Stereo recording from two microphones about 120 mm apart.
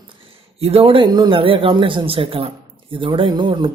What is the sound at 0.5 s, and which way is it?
Speech, 55° right (ahead or behind).